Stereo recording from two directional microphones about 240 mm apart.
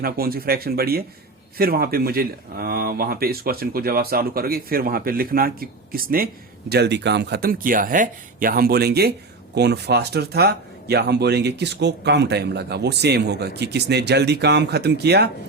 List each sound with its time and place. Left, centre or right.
0.0 s speech: right